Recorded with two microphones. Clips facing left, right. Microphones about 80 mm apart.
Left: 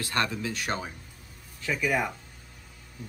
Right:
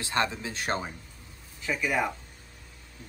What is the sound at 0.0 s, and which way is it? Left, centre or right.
Speech, right.